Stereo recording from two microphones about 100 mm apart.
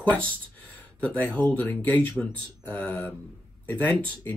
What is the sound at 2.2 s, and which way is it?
Speech, 10° right (ahead or behind).